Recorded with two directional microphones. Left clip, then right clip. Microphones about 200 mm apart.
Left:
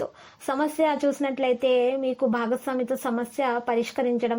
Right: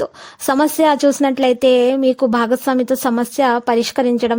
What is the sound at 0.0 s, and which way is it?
A woman's voice, 45° right (ahead or behind).